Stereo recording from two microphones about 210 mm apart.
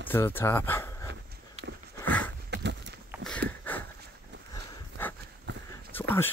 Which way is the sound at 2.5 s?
55° right (ahead or behind).